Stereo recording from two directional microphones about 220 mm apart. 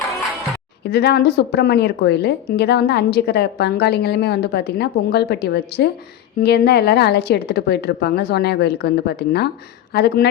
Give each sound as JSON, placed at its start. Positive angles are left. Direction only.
{"t": 0.9, "sound": "a woman's voice", "side_deg": 45}